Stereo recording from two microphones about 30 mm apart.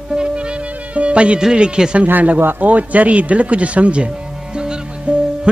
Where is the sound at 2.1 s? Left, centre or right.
Right.